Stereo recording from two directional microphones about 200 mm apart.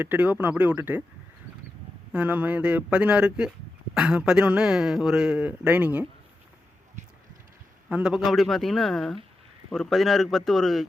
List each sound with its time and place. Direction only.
0.0 s speech: 10° right (ahead or behind)
2.1 s speech: 5° right (ahead or behind)
7.0 s a sound: 35° right (ahead or behind)
7.9 s speech: 5° right (ahead or behind)